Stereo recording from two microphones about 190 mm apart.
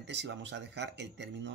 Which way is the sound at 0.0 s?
65° right (ahead or behind).